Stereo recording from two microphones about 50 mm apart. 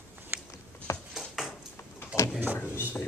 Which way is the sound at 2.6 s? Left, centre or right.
Left.